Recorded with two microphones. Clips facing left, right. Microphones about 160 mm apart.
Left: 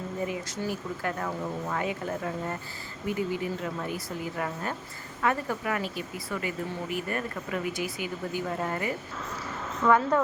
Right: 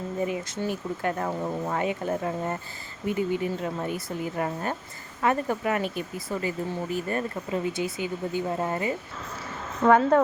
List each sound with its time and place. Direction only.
0.3 s speech: 25° right (ahead or behind)
5.8 s speech: 45° right (ahead or behind)
6.3 s speech: 30° right (ahead or behind)